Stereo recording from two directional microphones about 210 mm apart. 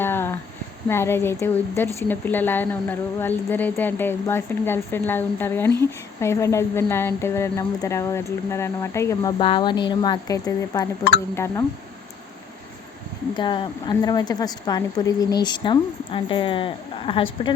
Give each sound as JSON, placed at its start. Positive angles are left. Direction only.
{"t": 0.0, "sound": "a sound", "side_deg": 10}
{"t": 0.9, "sound": "speech", "side_deg": 10}
{"t": 13.3, "sound": "speech", "side_deg": 20}